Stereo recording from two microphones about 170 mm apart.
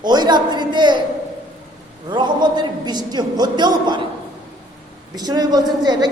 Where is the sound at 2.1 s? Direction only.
25° right (ahead or behind).